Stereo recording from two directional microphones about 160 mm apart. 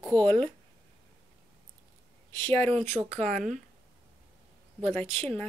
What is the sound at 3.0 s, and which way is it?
Speech, 45° right (ahead or behind).